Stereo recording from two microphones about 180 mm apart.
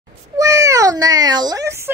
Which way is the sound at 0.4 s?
20° right (ahead or behind).